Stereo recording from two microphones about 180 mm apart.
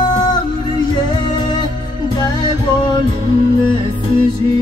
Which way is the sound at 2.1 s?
25° left (ahead or behind).